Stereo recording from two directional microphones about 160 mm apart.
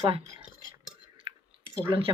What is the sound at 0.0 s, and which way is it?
Speech, 30° right (ahead or behind).